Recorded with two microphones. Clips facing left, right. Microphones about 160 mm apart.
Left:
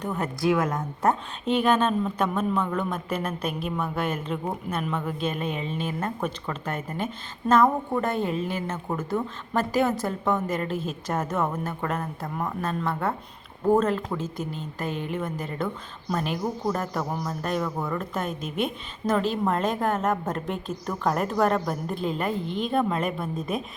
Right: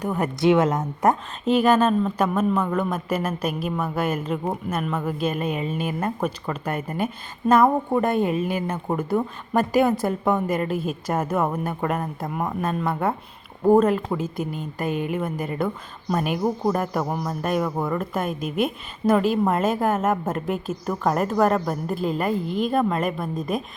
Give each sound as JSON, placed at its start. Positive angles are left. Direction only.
{"t": 0.0, "sound": "a woman's voice", "side_deg": -10}
{"t": 0.3, "sound": "a woman's voice", "side_deg": -25}
{"t": 1.0, "sound": "a woman's voice", "side_deg": -5}